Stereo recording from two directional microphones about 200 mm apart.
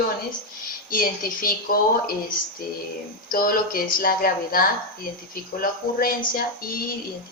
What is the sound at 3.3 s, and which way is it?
A woman's voice, 45° left (ahead or behind).